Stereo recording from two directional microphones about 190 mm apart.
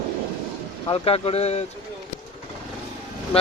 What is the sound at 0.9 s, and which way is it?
Speech, 30° left (ahead or behind).